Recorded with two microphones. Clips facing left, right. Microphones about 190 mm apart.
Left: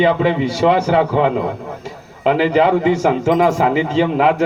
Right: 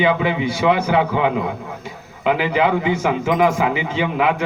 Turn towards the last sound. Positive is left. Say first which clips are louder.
# left 5 dB
turn(degrees=35)  # may be behind; listen again after turning